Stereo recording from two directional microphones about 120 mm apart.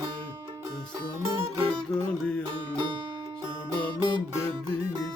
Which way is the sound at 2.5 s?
40° right (ahead or behind).